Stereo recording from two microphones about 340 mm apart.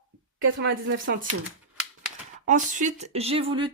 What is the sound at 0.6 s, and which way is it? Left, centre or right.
Speech, right.